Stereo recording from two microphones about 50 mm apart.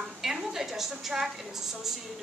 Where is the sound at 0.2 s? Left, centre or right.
Centre.